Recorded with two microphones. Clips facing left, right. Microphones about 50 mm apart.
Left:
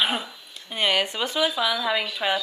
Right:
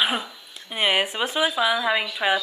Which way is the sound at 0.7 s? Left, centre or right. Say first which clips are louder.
Right 1 dB; centre.